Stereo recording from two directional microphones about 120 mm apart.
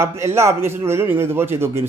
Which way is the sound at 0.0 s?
20° right (ahead or behind).